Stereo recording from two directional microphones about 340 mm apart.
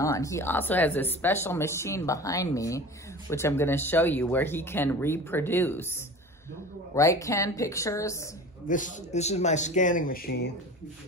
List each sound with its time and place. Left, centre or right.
0.0 s speech: centre
7.0 s speech: centre
8.6 s a man's voice: left